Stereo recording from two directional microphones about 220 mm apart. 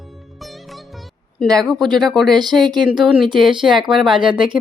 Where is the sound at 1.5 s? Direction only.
Centre (ahead or behind).